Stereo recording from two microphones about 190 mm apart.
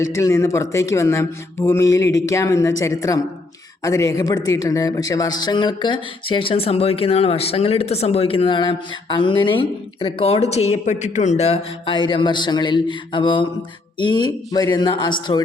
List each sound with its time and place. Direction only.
0.0 s speech: 15° left (ahead or behind)